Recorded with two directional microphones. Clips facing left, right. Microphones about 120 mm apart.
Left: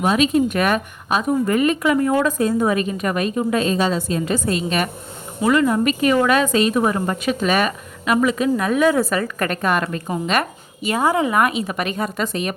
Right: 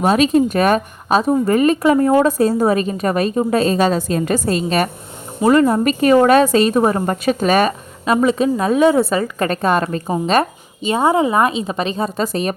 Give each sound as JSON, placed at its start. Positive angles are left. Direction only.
{"t": 0.0, "sound": "a woman's voice", "side_deg": -40}